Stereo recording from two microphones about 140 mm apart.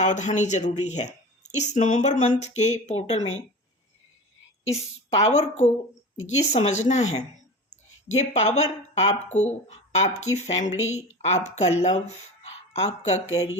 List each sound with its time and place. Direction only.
0.0 s speech: 60° left (ahead or behind)
4.7 s speech: 50° left (ahead or behind)